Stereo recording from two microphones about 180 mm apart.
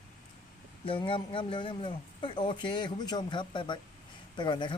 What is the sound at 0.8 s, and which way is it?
Speech, 30° left (ahead or behind).